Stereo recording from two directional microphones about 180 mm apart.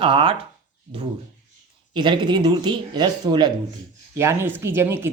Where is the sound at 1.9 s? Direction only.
25° right (ahead or behind).